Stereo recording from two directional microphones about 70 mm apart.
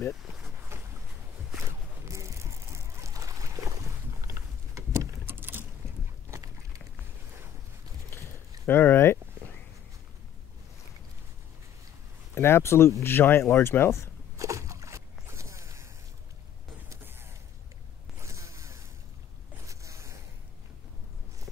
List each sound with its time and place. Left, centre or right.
0.1 s speech: centre
0.7 s boat: right
1.7 s a sound: right
5.2 s patter: right
8.1 s a sound: left
12.4 s speech: left
14.3 s boat: right
18.2 s zipper: right
19.6 s a sound: right